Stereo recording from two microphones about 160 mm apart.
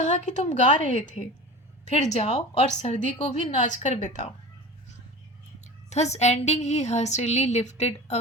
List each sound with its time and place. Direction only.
0.0 s a woman's voice: 50° left (ahead or behind)
5.9 s a woman's voice: 45° left (ahead or behind)